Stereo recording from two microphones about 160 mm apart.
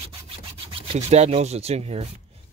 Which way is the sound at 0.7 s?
40° right (ahead or behind).